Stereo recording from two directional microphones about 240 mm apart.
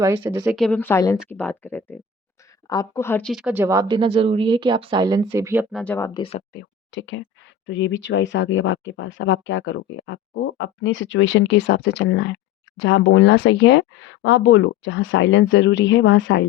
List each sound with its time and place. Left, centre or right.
0.0 s speech: centre
5.7 s speech: centre
6.1 s speech: left
6.5 s speech: left